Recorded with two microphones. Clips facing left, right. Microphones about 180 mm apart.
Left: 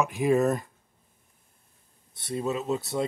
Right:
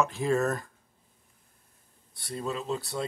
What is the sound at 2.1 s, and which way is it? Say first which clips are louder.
Speech: left 4 dB; 20° left (ahead or behind).